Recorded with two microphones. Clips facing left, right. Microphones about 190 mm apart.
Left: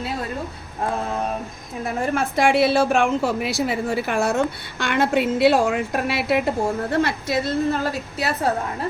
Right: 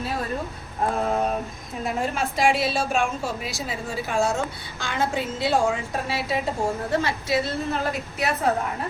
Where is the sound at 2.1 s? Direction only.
60° left (ahead or behind).